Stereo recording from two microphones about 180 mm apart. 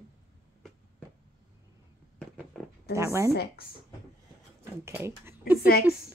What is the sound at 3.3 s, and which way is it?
Speech, 60° left (ahead or behind).